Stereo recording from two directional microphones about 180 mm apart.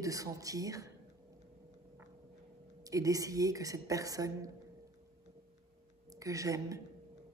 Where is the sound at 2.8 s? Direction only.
20° right (ahead or behind).